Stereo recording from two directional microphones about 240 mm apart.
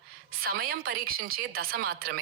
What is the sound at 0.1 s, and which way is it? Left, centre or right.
A woman's voice, right.